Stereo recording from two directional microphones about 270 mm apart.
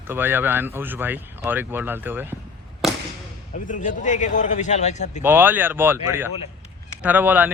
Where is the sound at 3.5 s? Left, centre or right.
Left.